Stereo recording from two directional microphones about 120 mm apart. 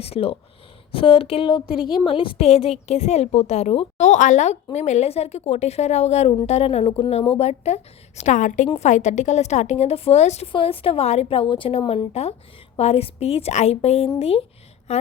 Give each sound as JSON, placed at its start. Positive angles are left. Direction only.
{"t": 0.0, "sound": "a woman's voice", "side_deg": 55}
{"t": 1.7, "sound": "a woman's voice", "side_deg": -5}
{"t": 2.0, "sound": "a woman's voice", "side_deg": 45}
{"t": 8.2, "sound": "a woman's voice", "side_deg": 85}
{"t": 8.8, "sound": "a woman's voice", "side_deg": 75}
{"t": 10.5, "sound": "a woman's voice", "side_deg": 50}